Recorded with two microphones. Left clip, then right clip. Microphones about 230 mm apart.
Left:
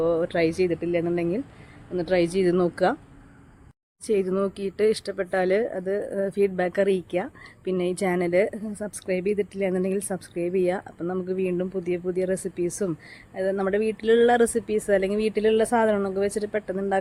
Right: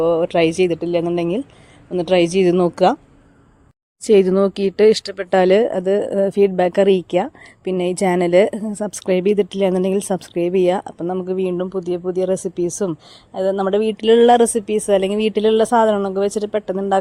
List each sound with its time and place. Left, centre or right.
0.0 s speech: right
4.0 s speech: right